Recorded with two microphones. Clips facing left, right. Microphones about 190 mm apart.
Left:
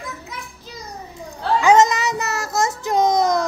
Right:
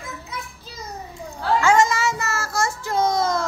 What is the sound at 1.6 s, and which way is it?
Child singing, 20° left (ahead or behind).